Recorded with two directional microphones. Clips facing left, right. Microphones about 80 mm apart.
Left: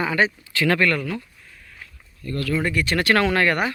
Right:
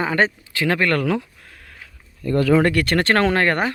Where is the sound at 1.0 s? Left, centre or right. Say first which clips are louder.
Right 8 dB; right.